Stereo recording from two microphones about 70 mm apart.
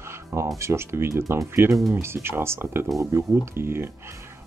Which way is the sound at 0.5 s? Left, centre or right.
Right.